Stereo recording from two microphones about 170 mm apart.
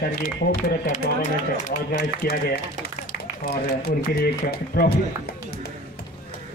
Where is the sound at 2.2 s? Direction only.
65° left (ahead or behind).